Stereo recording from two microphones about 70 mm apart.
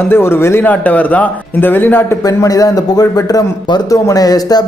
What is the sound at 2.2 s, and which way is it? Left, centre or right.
Speech, left.